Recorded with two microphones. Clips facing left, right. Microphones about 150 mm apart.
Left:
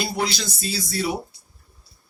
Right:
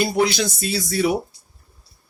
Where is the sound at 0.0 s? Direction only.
50° right (ahead or behind).